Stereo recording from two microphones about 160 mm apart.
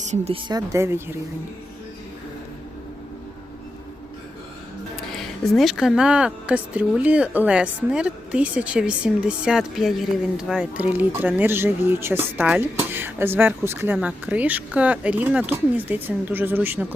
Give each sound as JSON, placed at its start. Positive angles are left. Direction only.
{"t": 0.0, "sound": "speech", "side_deg": -45}
{"t": 0.4, "sound": "speech", "side_deg": -20}
{"t": 4.9, "sound": "speech", "side_deg": 0}